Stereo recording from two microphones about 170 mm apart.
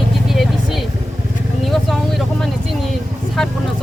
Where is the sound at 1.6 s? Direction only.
Centre (ahead or behind).